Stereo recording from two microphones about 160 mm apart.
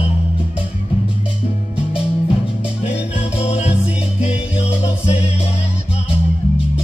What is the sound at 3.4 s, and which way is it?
Music, 40° left (ahead or behind).